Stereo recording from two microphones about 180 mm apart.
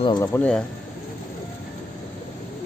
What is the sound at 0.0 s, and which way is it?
Speech, 25° left (ahead or behind).